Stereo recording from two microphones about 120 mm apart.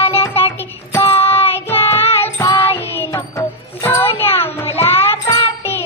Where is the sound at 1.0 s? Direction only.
50° left (ahead or behind).